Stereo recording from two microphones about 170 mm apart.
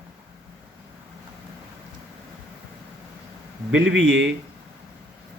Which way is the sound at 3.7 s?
90° right.